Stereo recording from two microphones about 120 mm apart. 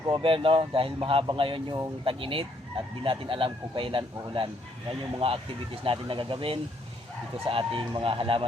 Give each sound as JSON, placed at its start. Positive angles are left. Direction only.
{"t": 0.1, "sound": "speech", "side_deg": -50}